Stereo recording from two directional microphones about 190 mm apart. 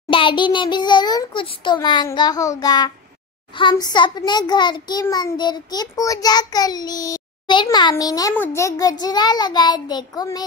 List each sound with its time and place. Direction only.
0.1 s a child's voice: 25° left (ahead or behind)